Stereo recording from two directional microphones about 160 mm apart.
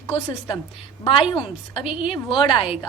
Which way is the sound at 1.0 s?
35° left (ahead or behind).